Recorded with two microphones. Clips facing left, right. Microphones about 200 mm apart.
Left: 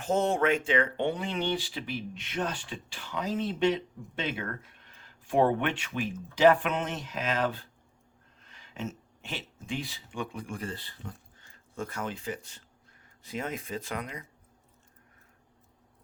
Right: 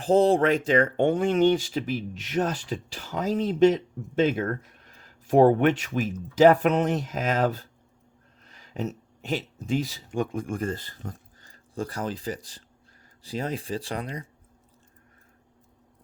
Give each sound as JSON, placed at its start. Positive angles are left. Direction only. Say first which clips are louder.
{"t": 0.0, "sound": "speech", "louder": "right 7 dB", "side_deg": -35}